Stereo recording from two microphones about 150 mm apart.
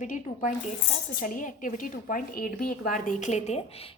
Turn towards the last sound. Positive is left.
turn(degrees=50)  # may be behind; listen again after turning